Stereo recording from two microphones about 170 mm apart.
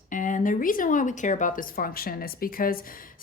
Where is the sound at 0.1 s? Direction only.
50° left (ahead or behind).